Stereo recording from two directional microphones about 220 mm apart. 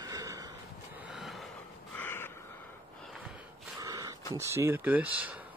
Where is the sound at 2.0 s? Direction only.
10° left (ahead or behind).